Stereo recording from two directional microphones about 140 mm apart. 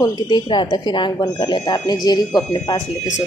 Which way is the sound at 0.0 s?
25° left (ahead or behind).